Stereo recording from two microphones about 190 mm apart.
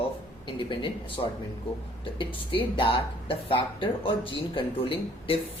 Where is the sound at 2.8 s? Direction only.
30° left (ahead or behind).